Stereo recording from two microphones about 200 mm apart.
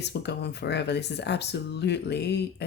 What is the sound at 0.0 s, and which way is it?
Speech, 60° left (ahead or behind).